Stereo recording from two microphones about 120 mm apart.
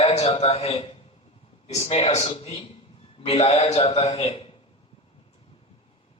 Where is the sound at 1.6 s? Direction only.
60° left (ahead or behind).